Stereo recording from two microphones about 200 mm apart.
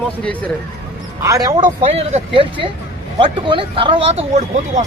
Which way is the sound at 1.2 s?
15° right (ahead or behind).